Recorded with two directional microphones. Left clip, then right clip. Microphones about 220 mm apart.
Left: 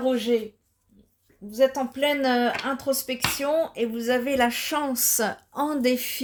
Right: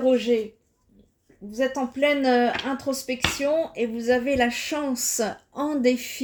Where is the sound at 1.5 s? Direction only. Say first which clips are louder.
Left 3 dB; 35° left (ahead or behind).